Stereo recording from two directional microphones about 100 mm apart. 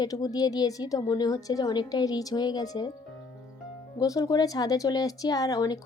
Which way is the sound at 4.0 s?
40° left (ahead or behind).